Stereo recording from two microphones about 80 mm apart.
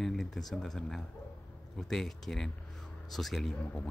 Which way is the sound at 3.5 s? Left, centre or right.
Centre.